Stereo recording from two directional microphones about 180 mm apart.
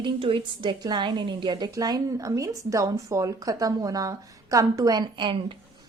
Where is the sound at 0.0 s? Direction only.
30° right (ahead or behind).